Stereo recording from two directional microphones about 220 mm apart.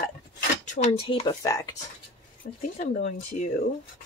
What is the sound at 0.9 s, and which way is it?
Speech, 25° left (ahead or behind).